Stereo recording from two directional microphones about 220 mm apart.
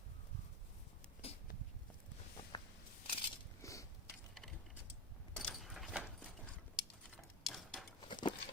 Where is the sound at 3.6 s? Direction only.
15° left (ahead or behind).